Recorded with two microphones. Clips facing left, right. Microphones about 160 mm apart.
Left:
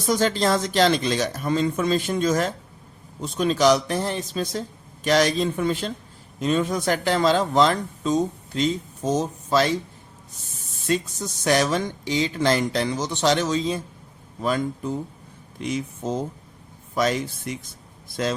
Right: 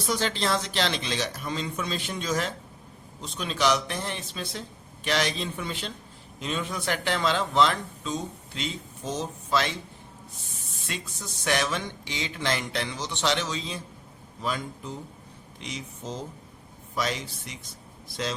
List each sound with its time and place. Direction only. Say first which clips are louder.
0.1 s speech: left 7 dB; 45° left (ahead or behind)
10.8 s speech: left 13 dB; 40° left (ahead or behind)